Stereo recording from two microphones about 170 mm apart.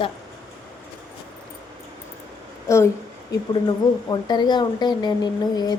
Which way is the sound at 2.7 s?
20° left (ahead or behind).